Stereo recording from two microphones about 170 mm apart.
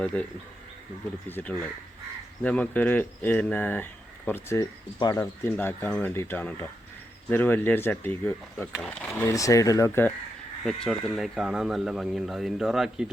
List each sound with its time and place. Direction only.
0.0 s speech: 5° left (ahead or behind)
1.3 s speech: 10° left (ahead or behind)
10.6 s speech: centre (ahead or behind)